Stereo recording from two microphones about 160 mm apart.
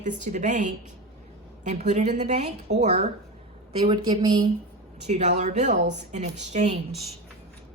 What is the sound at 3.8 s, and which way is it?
Speech, 30° right (ahead or behind).